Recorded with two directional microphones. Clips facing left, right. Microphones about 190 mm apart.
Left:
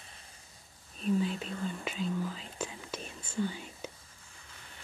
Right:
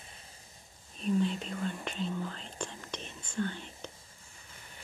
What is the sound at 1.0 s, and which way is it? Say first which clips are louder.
Whispering: right 1 dB; centre (ahead or behind).